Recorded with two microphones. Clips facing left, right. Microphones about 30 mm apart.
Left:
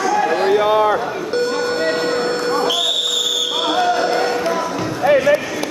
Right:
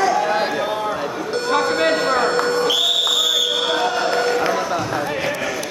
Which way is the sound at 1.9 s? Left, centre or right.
Centre.